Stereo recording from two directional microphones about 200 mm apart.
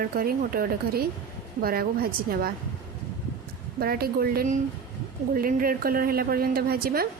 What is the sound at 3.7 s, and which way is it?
Speech, 50° right (ahead or behind).